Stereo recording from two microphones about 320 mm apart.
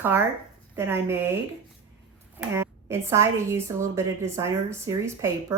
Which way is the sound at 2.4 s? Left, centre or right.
Centre.